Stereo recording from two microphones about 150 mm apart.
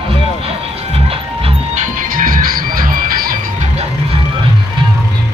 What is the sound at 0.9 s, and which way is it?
Music, 40° right (ahead or behind).